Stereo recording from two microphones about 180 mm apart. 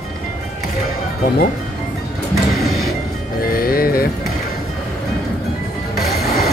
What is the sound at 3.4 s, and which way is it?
Music, 55° left (ahead or behind).